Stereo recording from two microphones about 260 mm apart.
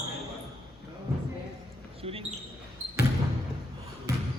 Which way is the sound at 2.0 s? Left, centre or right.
Right.